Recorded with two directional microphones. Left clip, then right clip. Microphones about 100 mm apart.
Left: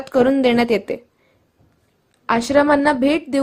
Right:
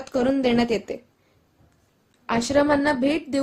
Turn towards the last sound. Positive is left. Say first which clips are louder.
# left 5 dB
turn(degrees=35)  # may be behind; listen again after turning